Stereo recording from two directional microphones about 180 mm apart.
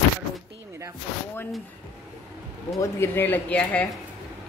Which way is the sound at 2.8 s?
10° left (ahead or behind).